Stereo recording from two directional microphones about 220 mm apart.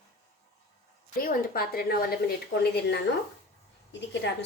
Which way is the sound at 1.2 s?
40° left (ahead or behind).